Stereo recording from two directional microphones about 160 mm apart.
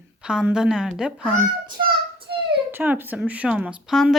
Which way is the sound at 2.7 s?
15° right (ahead or behind).